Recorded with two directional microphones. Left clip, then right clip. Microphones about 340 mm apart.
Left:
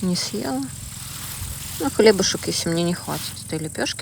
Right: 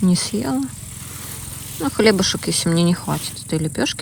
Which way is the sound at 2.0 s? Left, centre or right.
Centre.